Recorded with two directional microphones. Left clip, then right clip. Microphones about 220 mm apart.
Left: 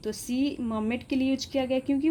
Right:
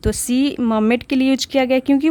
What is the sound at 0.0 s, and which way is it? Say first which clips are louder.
Speech: right 11 dB; 45° right (ahead or behind).